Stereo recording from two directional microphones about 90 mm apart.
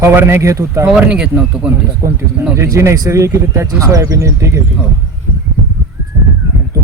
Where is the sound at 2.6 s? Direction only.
35° right (ahead or behind).